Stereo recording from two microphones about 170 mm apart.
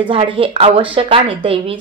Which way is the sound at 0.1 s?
30° right (ahead or behind).